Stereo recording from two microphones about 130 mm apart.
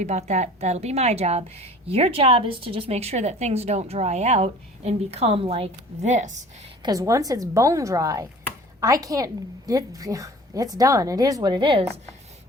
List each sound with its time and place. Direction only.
0.0 s a woman's voice: 60° right (ahead or behind)
6.8 s a woman's voice: 25° right (ahead or behind)